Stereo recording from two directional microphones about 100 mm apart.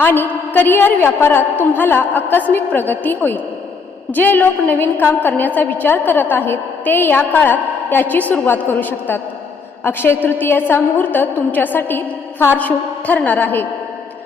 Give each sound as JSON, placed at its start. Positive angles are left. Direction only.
{"t": 0.0, "sound": "a woman's voice", "side_deg": 20}